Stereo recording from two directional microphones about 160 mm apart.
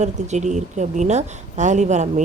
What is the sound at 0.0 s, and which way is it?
A woman's voice, 45° right (ahead or behind).